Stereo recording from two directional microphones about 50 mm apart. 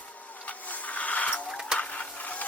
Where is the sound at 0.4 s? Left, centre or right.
Left.